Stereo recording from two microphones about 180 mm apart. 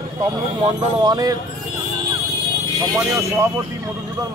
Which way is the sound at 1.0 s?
20° right (ahead or behind).